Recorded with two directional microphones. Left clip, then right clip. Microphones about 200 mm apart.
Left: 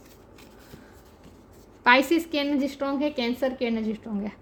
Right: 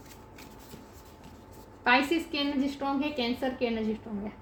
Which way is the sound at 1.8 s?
60° left (ahead or behind).